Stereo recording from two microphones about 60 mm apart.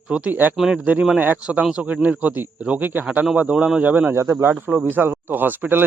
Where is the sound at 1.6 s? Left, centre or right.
Centre.